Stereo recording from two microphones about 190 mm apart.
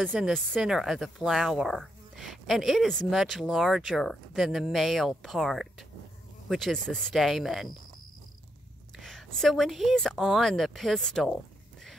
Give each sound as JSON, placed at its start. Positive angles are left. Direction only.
{"t": 0.0, "sound": "speech", "side_deg": 0}
{"t": 8.9, "sound": "speech", "side_deg": 0}